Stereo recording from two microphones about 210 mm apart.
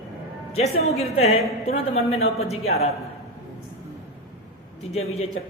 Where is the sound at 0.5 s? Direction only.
30° left (ahead or behind).